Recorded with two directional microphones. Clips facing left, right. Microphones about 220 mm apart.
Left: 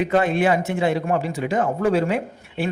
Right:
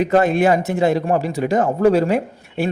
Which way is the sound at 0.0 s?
40° right (ahead or behind).